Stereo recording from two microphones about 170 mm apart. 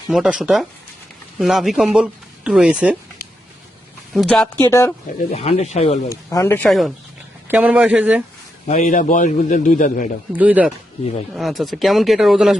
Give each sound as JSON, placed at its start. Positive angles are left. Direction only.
{"t": 0.1, "sound": "speech", "side_deg": -5}
{"t": 4.1, "sound": "speech", "side_deg": 0}
{"t": 4.7, "sound": "speech", "side_deg": 15}
{"t": 5.3, "sound": "speech", "side_deg": 35}
{"t": 6.1, "sound": "speech", "side_deg": 15}
{"t": 6.7, "sound": "speech", "side_deg": 0}
{"t": 8.6, "sound": "a man's voice", "side_deg": 45}
{"t": 10.3, "sound": "speech", "side_deg": -10}